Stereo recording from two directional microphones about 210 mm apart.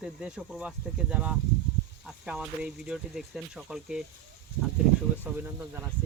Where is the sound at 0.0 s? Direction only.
5° right (ahead or behind).